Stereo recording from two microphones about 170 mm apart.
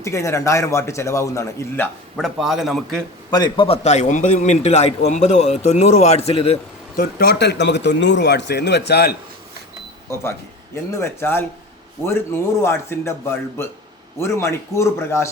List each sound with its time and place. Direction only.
0.0 s a man's voice: 15° left (ahead or behind)
2.1 s a man's voice: centre (ahead or behind)
3.2 s a man's voice: 25° left (ahead or behind)
3.8 s a man's voice: 45° left (ahead or behind)
6.9 s a man's voice: 65° left (ahead or behind)
10.1 s a man's voice: 15° left (ahead or behind)